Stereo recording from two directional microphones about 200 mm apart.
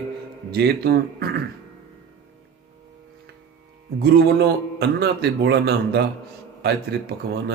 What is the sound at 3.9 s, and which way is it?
A man's voice, 55° right (ahead or behind).